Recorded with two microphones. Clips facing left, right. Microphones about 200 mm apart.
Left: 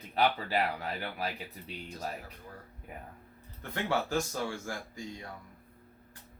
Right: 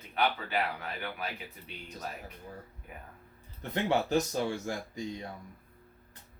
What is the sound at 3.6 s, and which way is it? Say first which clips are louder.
Speech: right 3 dB; 20° right (ahead or behind).